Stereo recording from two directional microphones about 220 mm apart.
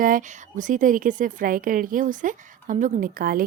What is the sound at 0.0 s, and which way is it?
Speech, 35° right (ahead or behind).